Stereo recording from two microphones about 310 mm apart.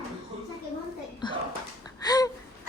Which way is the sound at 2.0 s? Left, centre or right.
Centre.